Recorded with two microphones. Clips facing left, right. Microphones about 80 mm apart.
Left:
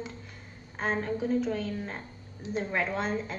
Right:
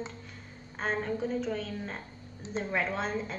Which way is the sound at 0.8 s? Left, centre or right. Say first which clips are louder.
Left 1 dB; centre.